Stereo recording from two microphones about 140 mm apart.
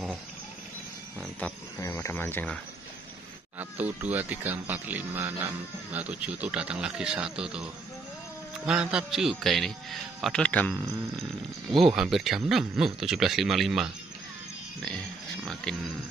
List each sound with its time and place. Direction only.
1.4 s speech: 10° left (ahead or behind)
1.8 s speech: 20° left (ahead or behind)
3.5 s a man's voice: 10° right (ahead or behind); by 10.7 s 10° left (ahead or behind)
11.8 s a man's voice: 5° right (ahead or behind)